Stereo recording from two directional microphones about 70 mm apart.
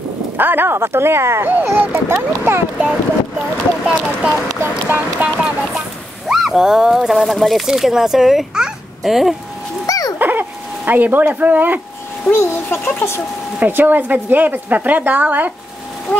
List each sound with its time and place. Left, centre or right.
0.4 s a woman's voice: right
3.3 s speech: centre
4.8 s a woman's voice: right
5.6 s speech: centre
9.8 s a sound: left
10.1 s a sound: right
10.9 s a woman's voice: right
12.3 s speech: left
13.6 s a woman's voice: right
16.1 s speech: left